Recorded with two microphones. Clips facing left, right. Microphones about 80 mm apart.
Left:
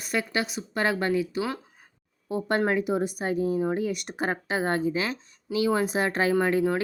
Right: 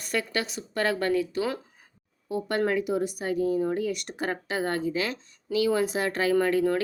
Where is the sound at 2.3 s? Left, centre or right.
Left.